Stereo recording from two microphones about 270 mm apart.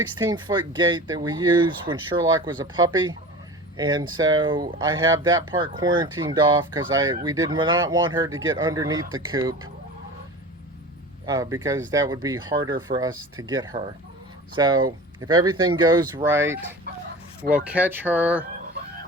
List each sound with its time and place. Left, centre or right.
0.2 s speech: centre
11.3 s speech: centre